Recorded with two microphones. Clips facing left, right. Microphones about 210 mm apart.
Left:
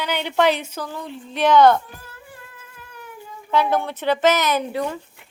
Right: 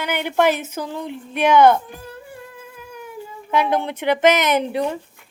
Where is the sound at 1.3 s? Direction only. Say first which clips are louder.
Right 1 dB; 10° right (ahead or behind).